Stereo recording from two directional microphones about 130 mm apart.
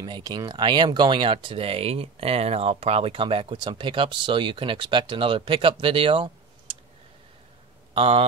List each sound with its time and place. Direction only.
0.0 s speech: 35° right (ahead or behind)
7.9 s a man's voice: 50° right (ahead or behind)